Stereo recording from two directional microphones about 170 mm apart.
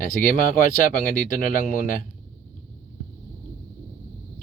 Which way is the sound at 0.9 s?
55° left (ahead or behind).